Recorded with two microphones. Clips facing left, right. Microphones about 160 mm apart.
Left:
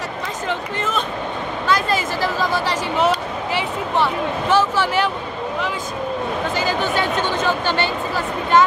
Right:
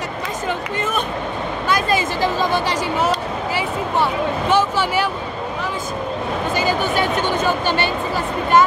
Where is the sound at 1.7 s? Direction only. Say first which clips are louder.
Even; 15° right (ahead or behind).